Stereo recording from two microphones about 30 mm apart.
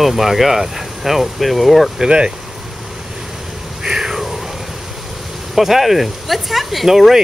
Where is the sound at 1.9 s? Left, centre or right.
Right.